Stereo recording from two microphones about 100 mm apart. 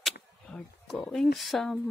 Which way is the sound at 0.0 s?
5° left (ahead or behind).